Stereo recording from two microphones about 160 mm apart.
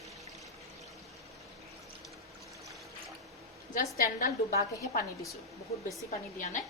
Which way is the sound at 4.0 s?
65° left (ahead or behind).